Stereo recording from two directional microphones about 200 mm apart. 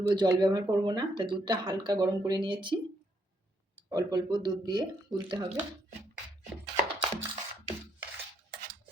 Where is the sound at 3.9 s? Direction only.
20° right (ahead or behind).